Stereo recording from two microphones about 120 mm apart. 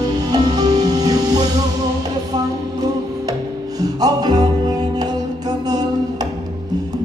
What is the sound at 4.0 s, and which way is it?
Music, 35° right (ahead or behind).